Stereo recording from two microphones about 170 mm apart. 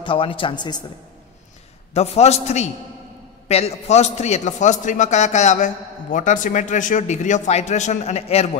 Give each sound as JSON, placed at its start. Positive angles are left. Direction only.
{"t": 0.0, "sound": "a man's voice", "side_deg": 30}
{"t": 2.0, "sound": "a man's voice", "side_deg": 40}